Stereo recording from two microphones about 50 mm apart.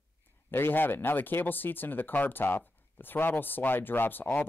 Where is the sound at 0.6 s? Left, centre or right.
Left.